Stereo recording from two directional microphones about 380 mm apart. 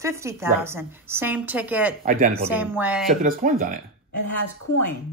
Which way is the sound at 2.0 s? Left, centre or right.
Right.